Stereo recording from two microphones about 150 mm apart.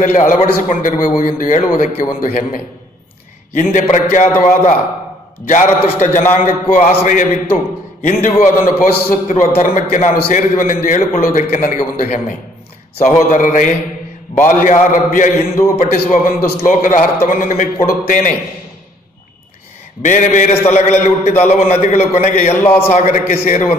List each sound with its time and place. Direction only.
0.0 s a man's voice: 60° left (ahead or behind)
20.0 s a man's voice: 55° left (ahead or behind)
22.6 s a man's voice: 15° left (ahead or behind)
22.9 s a man's voice: 55° left (ahead or behind)